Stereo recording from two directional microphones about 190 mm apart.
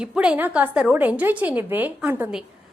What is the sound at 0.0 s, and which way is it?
A woman's voice, 5° right (ahead or behind).